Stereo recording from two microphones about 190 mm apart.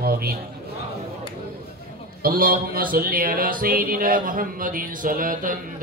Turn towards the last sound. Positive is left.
turn(degrees=-45)  # may be behind; listen again after turning